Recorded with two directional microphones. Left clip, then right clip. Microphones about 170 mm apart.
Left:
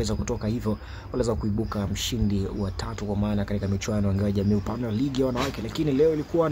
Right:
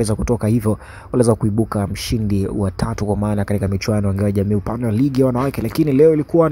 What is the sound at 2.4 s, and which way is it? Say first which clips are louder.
Speech: right 9 dB; 40° right (ahead or behind).